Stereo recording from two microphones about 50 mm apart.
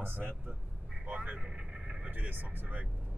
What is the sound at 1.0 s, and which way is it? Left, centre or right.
Speech, right.